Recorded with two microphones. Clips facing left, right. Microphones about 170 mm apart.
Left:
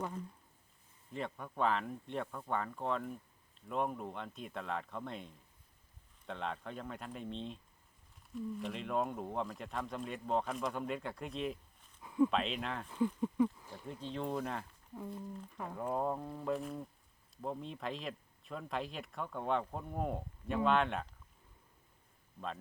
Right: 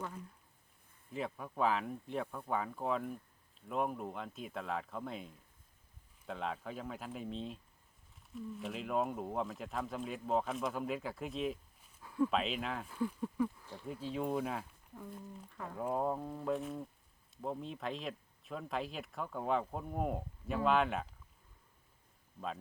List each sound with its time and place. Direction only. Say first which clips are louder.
1.1 s speech: right 1 dB; 5° right (ahead or behind)
12.0 s a sound: left 3 dB; 15° left (ahead or behind)
12.3 s speech: even; centre (ahead or behind)
13.2 s speech: left 3 dB; 15° left (ahead or behind)
13.8 s speech: right 2 dB; 5° right (ahead or behind)
15.7 s speech: right 1 dB; centre (ahead or behind)
22.4 s speech: right 1 dB; 5° right (ahead or behind)